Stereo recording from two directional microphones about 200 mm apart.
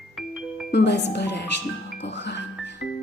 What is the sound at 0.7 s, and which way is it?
Speech, 55° left (ahead or behind).